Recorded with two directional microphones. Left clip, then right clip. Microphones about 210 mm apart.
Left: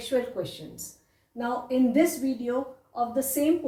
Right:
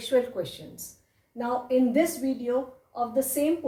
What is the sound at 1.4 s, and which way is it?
A woman's voice, 15° right (ahead or behind).